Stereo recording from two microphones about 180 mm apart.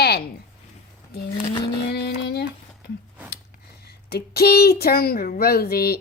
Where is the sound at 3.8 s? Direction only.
60° left (ahead or behind).